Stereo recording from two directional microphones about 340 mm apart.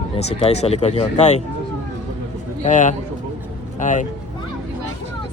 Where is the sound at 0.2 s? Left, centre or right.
Centre.